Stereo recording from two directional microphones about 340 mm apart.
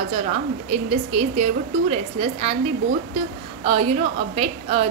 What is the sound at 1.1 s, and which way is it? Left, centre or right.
A woman's voice, centre.